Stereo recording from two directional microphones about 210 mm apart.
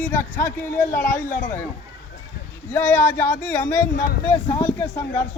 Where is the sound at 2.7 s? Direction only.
10° left (ahead or behind).